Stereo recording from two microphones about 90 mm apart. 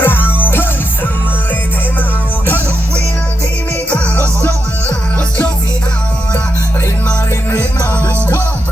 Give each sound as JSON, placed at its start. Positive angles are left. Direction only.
{"t": 0.0, "sound": "music", "side_deg": 25}
{"t": 3.8, "sound": "music", "side_deg": 15}